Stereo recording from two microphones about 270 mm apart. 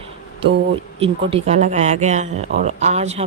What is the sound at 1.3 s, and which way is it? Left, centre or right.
A man's voice, right.